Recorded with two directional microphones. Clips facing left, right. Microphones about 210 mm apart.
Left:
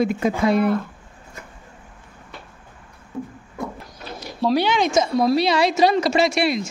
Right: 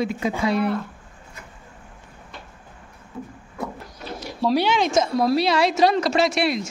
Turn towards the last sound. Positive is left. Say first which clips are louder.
# left 1 dB
turn(degrees=0)  # may be behind; listen again after turning